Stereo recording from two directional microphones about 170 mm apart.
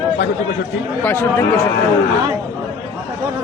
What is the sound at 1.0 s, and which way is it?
Speech, 10° left (ahead or behind).